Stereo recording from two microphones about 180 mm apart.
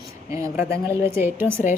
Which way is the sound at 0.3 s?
15° right (ahead or behind).